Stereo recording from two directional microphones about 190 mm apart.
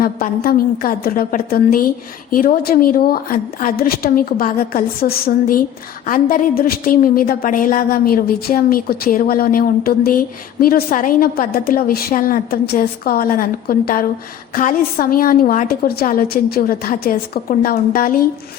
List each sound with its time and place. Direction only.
0.0 s a woman's voice: 50° left (ahead or behind)